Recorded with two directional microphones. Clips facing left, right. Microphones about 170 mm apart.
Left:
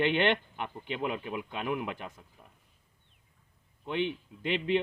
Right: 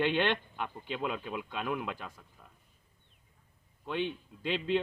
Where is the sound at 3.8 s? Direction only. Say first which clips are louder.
Left 2 dB; 15° left (ahead or behind).